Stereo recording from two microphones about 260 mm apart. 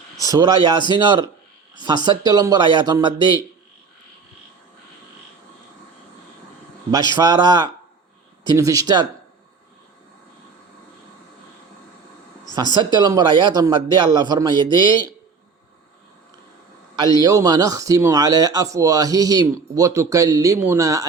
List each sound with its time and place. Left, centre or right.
0.2 s a man's voice: centre
6.9 s a man's voice: centre
12.7 s a man's voice: centre
16.9 s a man's voice: centre